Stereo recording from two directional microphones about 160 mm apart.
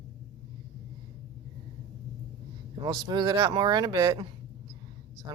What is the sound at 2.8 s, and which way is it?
Speech, 25° right (ahead or behind).